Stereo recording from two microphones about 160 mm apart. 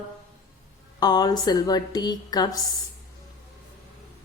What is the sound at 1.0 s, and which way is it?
A woman's voice, 25° left (ahead or behind).